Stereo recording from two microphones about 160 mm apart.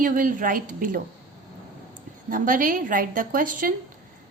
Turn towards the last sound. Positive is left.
turn(degrees=-60)  # may be behind; listen again after turning